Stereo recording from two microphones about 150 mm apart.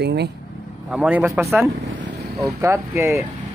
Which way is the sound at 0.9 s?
10° right (ahead or behind).